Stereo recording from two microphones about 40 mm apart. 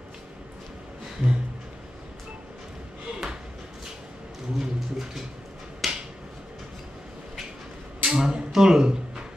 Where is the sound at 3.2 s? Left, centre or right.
Centre.